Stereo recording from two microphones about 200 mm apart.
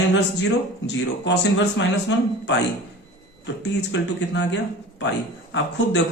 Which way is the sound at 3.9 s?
65° left (ahead or behind).